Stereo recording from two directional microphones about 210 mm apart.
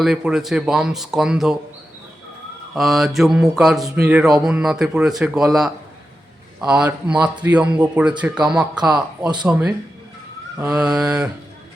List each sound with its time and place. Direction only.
0.0 s mantra: 5° right (ahead or behind)
2.7 s mantra: centre (ahead or behind)